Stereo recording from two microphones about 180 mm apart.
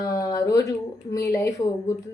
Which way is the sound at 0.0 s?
20° left (ahead or behind).